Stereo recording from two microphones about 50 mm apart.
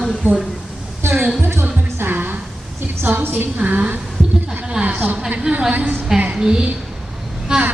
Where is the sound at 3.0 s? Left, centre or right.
Right.